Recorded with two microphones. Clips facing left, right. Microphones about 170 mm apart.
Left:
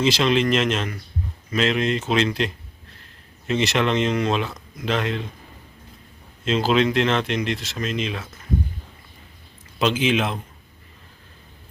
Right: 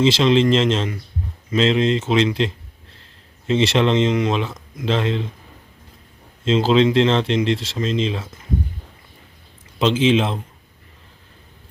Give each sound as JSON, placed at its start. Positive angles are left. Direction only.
{"t": 0.0, "sound": "speech", "side_deg": -25}
{"t": 6.4, "sound": "speech", "side_deg": -25}
{"t": 9.7, "sound": "speech", "side_deg": -25}